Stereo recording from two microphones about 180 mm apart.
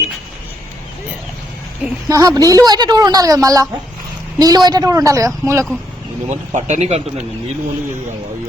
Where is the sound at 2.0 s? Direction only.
20° right (ahead or behind).